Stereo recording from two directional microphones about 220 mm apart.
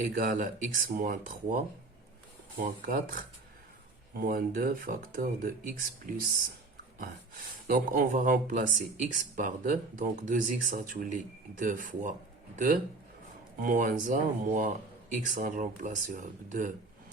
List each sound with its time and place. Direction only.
0.1 s speech: 40° right (ahead or behind)
7.7 s speech: 40° right (ahead or behind)